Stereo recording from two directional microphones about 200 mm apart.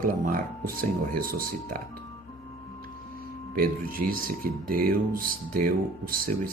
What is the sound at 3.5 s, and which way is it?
Speech, 45° right (ahead or behind).